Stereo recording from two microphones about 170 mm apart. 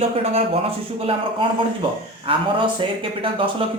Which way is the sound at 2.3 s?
30° right (ahead or behind).